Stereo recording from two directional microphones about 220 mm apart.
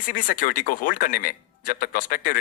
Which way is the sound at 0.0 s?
40° left (ahead or behind).